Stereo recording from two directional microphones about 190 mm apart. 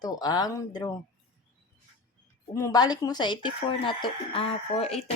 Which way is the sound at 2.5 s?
15° left (ahead or behind).